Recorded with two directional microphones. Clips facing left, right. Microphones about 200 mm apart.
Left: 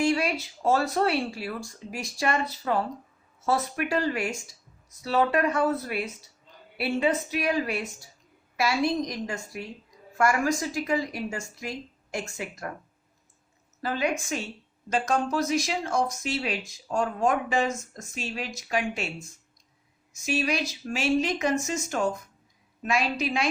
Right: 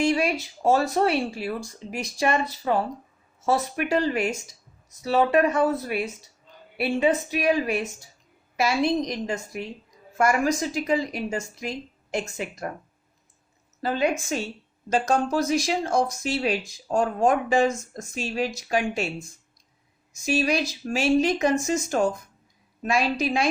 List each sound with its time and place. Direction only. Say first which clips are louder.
0.0 s a woman's voice: right 2 dB; 20° right (ahead or behind)
13.8 s speech: right 4 dB; 25° right (ahead or behind)
20.2 s speech: right 4 dB; 35° right (ahead or behind)